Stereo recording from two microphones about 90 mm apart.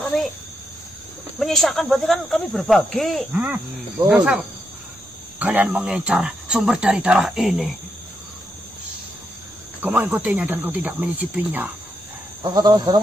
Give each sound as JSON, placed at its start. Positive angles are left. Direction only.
{"t": 1.4, "sound": "speech", "side_deg": 0}
{"t": 3.3, "sound": "speech", "side_deg": -15}
{"t": 5.4, "sound": "speech", "side_deg": -15}
{"t": 9.8, "sound": "speech", "side_deg": -20}
{"t": 12.5, "sound": "speech", "side_deg": -50}